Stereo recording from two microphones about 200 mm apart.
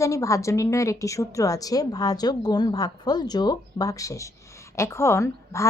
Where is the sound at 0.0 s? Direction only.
15° left (ahead or behind).